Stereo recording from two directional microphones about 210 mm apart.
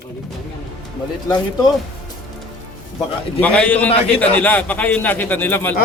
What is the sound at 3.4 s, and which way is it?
Speech, 5° left (ahead or behind).